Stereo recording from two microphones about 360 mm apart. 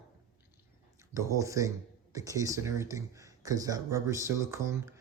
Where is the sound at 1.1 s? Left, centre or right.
Centre.